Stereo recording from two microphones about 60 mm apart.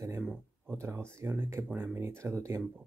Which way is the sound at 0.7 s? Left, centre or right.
Right.